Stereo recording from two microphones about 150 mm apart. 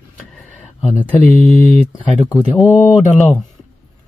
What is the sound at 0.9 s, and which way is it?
Speech, centre (ahead or behind).